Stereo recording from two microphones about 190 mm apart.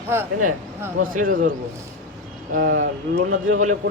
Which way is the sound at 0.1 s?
15° right (ahead or behind).